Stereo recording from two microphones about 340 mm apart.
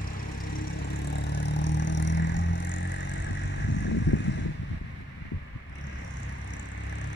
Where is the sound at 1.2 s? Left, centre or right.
Left.